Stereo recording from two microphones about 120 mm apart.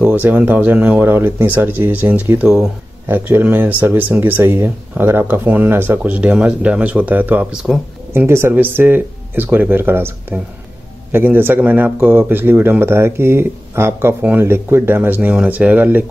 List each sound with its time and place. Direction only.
0.0 s speech: 15° right (ahead or behind)